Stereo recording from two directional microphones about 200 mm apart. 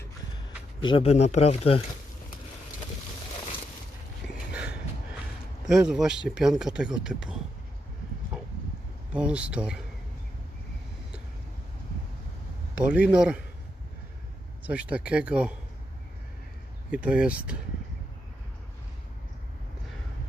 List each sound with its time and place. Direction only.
0.8 s speech: 25° left (ahead or behind)
5.6 s speech: centre (ahead or behind)
9.1 s speech: 5° right (ahead or behind)
12.8 s speech: 5° right (ahead or behind)
14.6 s speech: 5° right (ahead or behind)
16.9 s speech: 5° right (ahead or behind)